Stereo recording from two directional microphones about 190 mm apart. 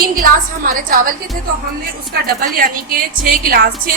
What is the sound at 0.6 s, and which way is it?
A woman's voice, 45° right (ahead or behind).